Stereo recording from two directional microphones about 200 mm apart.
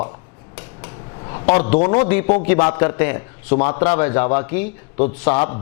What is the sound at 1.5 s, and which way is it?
A man's voice, 10° left (ahead or behind).